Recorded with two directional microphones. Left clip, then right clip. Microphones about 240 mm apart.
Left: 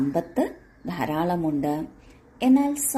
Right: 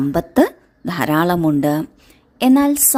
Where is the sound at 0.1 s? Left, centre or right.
Right.